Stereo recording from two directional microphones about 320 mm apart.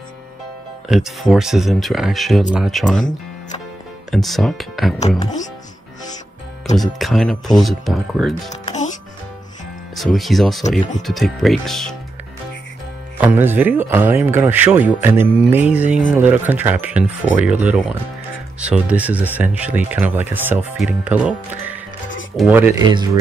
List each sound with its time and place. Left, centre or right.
0.8 s speech: centre
4.1 s speech: centre
6.8 s speech: centre
8.5 s music: left
9.9 s speech: centre
13.2 s speech: centre